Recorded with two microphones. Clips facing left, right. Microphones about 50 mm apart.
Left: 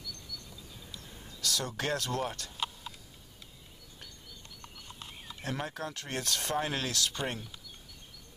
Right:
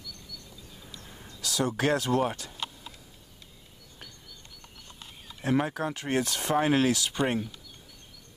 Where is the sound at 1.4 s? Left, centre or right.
Centre.